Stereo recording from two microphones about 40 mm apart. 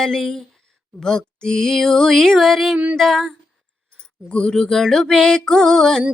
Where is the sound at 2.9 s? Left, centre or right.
Centre.